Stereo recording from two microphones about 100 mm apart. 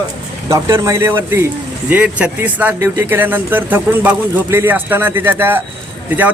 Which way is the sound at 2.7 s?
30° right (ahead or behind).